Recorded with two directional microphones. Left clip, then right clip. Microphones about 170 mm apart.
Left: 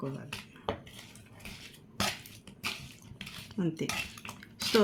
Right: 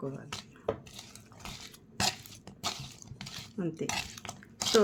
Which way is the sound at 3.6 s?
35° left (ahead or behind).